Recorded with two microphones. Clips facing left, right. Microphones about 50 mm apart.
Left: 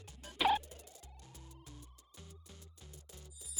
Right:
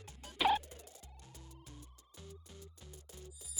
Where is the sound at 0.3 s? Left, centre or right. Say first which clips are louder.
Even; centre.